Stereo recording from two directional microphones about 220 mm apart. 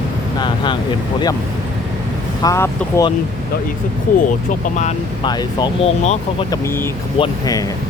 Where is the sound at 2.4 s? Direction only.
15° left (ahead or behind).